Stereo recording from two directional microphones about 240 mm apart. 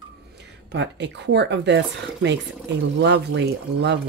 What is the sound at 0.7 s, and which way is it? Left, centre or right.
Speech, right.